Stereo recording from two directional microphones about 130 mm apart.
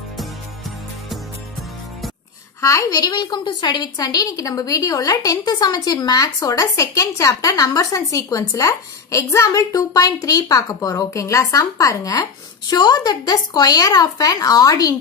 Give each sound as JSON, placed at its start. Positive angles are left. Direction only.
{"t": 2.6, "sound": "a woman's voice", "side_deg": 25}